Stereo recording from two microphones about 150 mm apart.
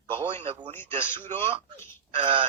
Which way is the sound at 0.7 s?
15° left (ahead or behind).